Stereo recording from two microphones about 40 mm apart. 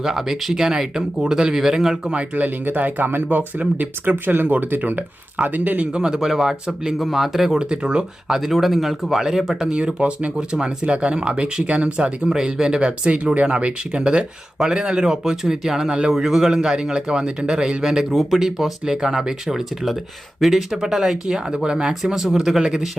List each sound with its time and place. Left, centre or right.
0.0 s speech: centre
2.3 s speech: right
5.8 s speech: right
7.6 s speech: right
8.3 s speech: centre
9.6 s speech: right
10.3 s speech: centre
18.3 s speech: centre; by 21.9 s right
22.0 s speech: centre